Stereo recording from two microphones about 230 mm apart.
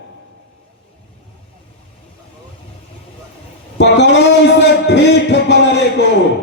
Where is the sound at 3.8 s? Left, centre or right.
Left.